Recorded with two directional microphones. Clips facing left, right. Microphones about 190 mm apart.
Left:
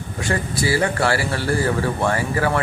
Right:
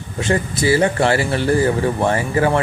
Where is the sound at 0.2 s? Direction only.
20° right (ahead or behind).